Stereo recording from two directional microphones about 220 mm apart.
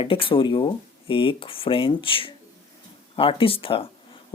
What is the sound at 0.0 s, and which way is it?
Speech, 25° left (ahead or behind).